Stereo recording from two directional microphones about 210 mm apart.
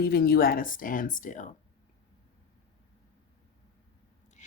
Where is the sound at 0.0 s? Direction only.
45° left (ahead or behind).